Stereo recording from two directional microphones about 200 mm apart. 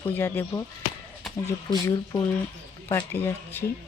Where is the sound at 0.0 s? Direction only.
10° left (ahead or behind).